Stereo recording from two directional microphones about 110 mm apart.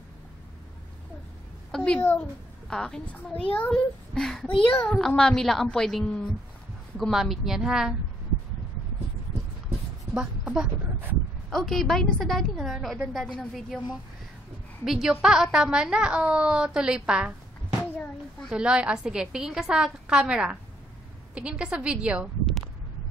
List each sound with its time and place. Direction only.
1.7 s a sound: 5° left (ahead or behind)
2.7 s a woman's voice: 5° left (ahead or behind)
4.1 s a woman's voice: 5° left (ahead or behind)
10.1 s a woman's voice: 10° right (ahead or behind)
11.5 s a woman's voice: 5° left (ahead or behind)
18.5 s a woman's voice: 10° right (ahead or behind)